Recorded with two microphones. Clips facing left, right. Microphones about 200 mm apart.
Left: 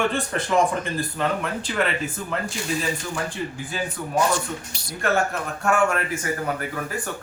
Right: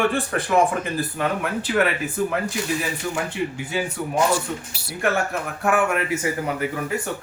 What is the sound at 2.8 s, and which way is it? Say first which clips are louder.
Speech: right 1 dB; 15° right (ahead or behind).